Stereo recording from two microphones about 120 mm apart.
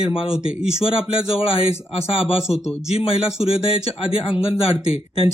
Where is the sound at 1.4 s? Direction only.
50° left (ahead or behind).